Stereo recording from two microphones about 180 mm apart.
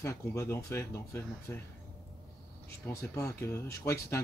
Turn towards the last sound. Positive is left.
turn(degrees=15)  # may be behind; listen again after turning